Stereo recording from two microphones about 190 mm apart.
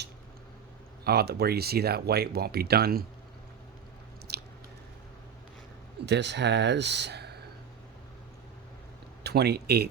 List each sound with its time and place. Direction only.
1.0 s speech: 55° right (ahead or behind)
4.3 s biting: 60° right (ahead or behind)
6.1 s speech: 65° right (ahead or behind)
9.2 s speech: 55° right (ahead or behind)